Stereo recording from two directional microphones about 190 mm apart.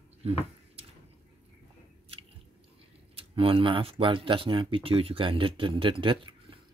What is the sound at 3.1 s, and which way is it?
Speech, 30° right (ahead or behind).